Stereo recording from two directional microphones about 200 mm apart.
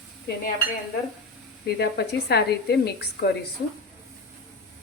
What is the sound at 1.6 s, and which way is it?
A woman's voice, 55° left (ahead or behind).